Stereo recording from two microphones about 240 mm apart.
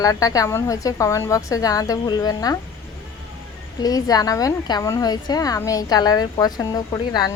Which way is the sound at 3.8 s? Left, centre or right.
Centre.